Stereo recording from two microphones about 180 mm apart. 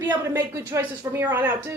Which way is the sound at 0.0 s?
10° right (ahead or behind).